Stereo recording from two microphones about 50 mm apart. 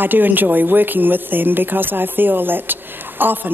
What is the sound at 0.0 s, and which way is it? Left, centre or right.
Speech, right.